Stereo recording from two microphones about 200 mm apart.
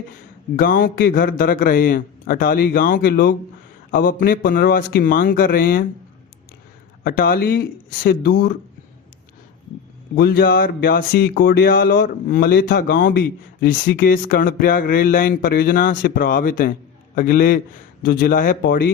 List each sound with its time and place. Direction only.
0.5 s speech: 45° left (ahead or behind)
7.0 s speech: 45° left (ahead or behind)
10.2 s speech: 50° left (ahead or behind)